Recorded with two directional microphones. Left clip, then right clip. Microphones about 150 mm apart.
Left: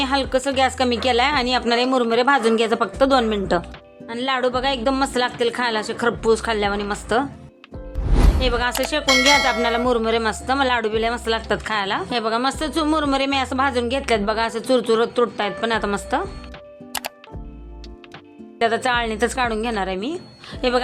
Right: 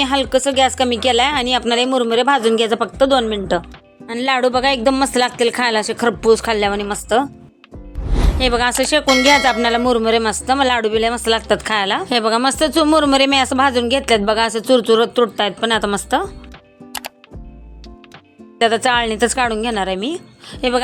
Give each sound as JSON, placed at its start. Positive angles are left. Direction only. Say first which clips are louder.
{"t": 0.0, "sound": "speech", "louder": "right 4 dB", "side_deg": -25}
{"t": 4.0, "sound": "a woman's voice", "louder": "right 5 dB", "side_deg": -45}
{"t": 8.0, "sound": "music", "louder": "even", "side_deg": 0}
{"t": 8.4, "sound": "speech", "louder": "right 6 dB", "side_deg": -50}
{"t": 9.0, "sound": "a sound", "louder": "right 2 dB", "side_deg": 0}
{"t": 9.4, "sound": "speech", "louder": "right 4 dB", "side_deg": -30}
{"t": 16.9, "sound": "music", "louder": "even", "side_deg": 0}
{"t": 18.6, "sound": "a woman's voice", "louder": "right 5 dB", "side_deg": -30}